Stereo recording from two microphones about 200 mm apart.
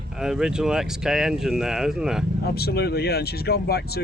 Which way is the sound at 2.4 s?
50° left (ahead or behind).